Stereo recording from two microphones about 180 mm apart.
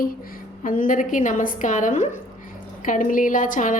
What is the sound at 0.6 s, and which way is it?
A woman's voice, 50° left (ahead or behind).